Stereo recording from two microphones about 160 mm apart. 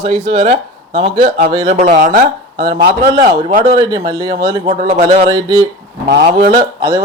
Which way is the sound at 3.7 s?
25° right (ahead or behind).